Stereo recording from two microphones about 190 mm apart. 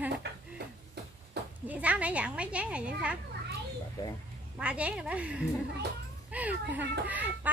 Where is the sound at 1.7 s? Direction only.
5° right (ahead or behind).